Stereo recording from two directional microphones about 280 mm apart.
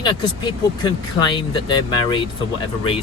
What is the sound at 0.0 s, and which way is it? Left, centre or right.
Speech, centre.